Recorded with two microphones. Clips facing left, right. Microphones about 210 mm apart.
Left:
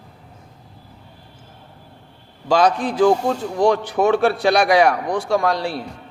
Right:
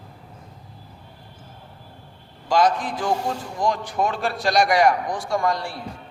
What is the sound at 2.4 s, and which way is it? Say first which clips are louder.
A man's voice: left 3 dB; 70° left (ahead or behind).